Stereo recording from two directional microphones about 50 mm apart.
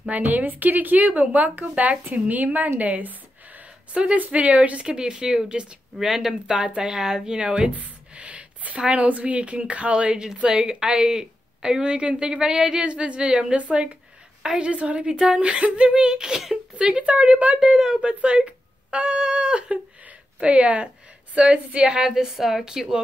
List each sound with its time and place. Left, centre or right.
0.1 s a woman's voice: right
2.8 s a sound: right
3.9 s a woman's voice: right
5.9 s a woman's voice: centre
14.7 s a woman's voice: right
15.0 s a woman's voice: centre
17.6 s a woman's voice: centre
18.0 s a woman's voice: right; by 23.0 s centre